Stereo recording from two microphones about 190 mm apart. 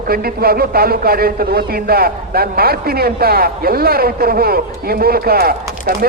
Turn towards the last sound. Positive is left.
turn(degrees=-50)  # may be behind; listen again after turning